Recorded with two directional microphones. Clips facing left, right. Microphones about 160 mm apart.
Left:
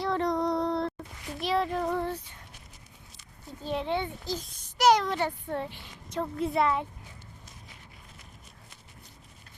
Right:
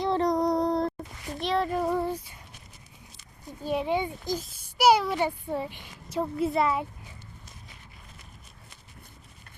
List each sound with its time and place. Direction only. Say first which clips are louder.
0.2 s child singing: right 3 dB; 40° right (ahead or behind)
1.4 s a child's voice: right 1 dB; centre (ahead or behind)
3.6 s a child's voice: right 3 dB; 10° right (ahead or behind)